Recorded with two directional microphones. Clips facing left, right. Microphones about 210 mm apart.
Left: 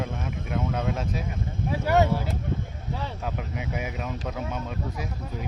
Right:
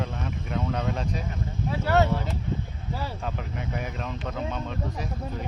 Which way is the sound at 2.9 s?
Centre (ahead or behind).